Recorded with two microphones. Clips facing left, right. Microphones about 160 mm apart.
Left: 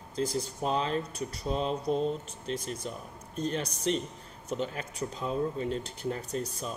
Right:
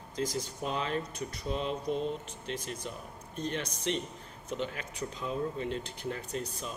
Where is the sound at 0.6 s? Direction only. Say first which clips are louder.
Left 4 dB; 35° left (ahead or behind).